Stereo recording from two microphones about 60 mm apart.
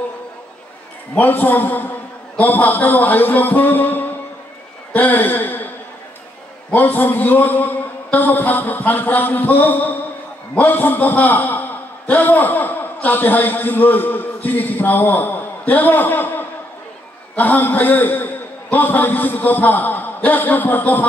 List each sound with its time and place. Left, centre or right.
1.1 s a man's voice: left
2.3 s music: left
4.9 s speech: left
6.7 s a man's voice: left